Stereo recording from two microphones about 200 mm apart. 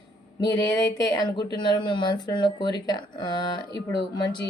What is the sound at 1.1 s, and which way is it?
Speech, 20° left (ahead or behind).